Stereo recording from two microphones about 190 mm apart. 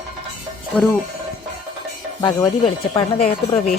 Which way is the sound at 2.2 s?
20° left (ahead or behind).